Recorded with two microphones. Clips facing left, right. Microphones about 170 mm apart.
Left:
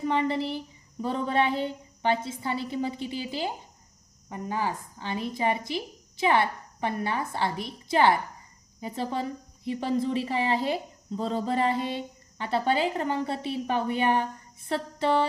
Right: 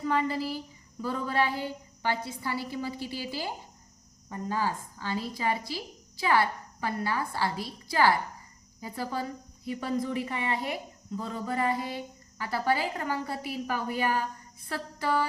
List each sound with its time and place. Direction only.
0.0 s a woman's voice: 25° left (ahead or behind)